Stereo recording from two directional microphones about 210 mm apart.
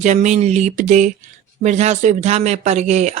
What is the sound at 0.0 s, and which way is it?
Speech, 35° right (ahead or behind).